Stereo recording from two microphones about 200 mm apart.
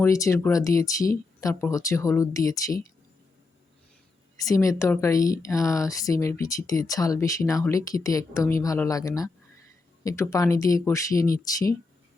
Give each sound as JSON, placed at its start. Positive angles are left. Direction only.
{"t": 0.0, "sound": "a woman's voice", "side_deg": 15}
{"t": 4.4, "sound": "a woman's voice", "side_deg": 15}